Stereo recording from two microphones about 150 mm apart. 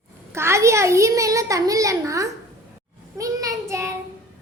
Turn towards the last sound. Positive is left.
turn(degrees=-20)  # may be behind; listen again after turning